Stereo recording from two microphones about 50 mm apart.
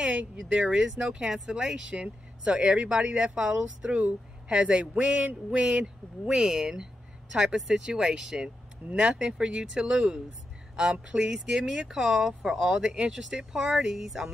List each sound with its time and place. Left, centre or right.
0.0 s speech: right
1.6 s speech: right
13.4 s speech: centre